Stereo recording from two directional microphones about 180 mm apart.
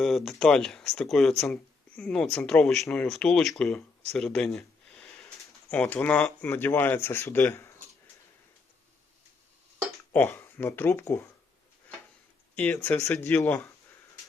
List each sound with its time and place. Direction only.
0.0 s speech: centre (ahead or behind)
5.7 s speech: 10° left (ahead or behind)
10.1 s speech: 10° left (ahead or behind)
12.5 s speech: 10° left (ahead or behind)